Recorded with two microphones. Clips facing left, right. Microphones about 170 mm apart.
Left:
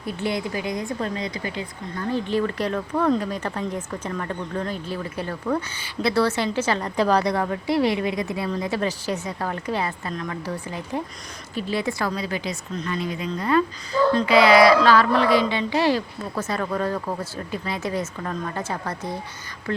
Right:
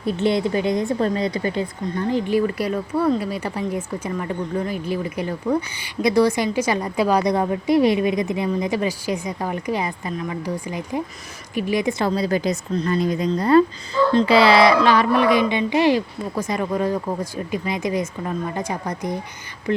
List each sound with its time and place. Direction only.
0.2 s a woman's voice: 25° right (ahead or behind)
2.0 s speech: 15° right (ahead or behind)
12.1 s a woman's voice: 40° right (ahead or behind); by 19.8 s 20° right (ahead or behind)